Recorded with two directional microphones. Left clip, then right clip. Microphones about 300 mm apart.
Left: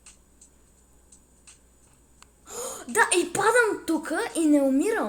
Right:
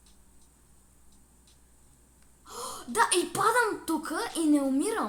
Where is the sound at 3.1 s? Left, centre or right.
Centre.